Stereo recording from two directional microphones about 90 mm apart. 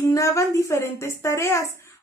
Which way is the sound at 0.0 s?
35° left (ahead or behind).